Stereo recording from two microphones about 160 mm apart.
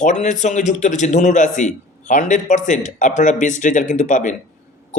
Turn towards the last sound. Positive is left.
turn(degrees=50)  # may be behind; listen again after turning